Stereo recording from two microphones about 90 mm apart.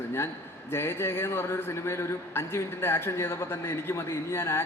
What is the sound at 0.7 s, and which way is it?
A man's voice, 25° left (ahead or behind).